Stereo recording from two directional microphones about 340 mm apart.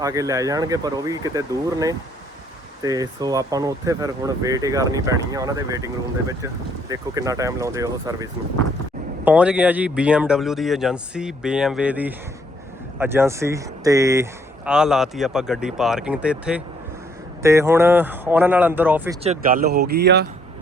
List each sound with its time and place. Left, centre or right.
0.0 s speech: centre
19.2 s speech: right